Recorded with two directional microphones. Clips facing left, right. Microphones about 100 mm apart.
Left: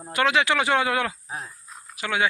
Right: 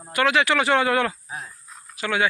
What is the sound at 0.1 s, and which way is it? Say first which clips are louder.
Speech: right 1 dB; 20° left (ahead or behind).